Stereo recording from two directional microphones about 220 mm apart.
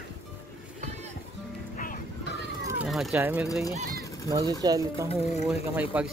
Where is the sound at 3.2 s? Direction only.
10° right (ahead or behind).